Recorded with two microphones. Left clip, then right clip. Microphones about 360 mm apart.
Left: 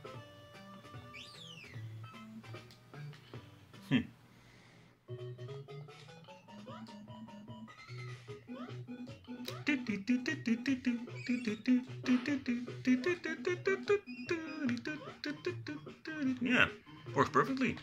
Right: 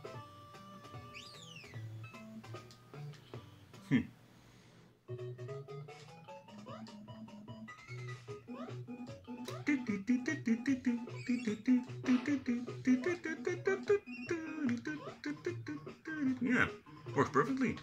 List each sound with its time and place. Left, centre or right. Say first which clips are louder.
3.9 s speech: even; centre
9.4 s music: left 1 dB; centre